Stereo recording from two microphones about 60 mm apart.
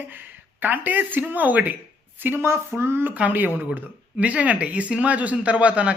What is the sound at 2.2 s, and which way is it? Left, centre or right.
Speech, right.